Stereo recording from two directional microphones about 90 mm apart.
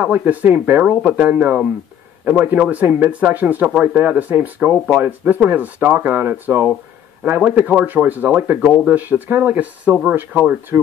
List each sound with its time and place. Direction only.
0.0 s speech: 15° right (ahead or behind)